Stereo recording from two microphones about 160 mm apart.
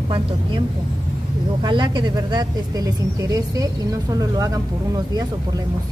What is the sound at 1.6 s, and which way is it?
Speech, 30° right (ahead or behind).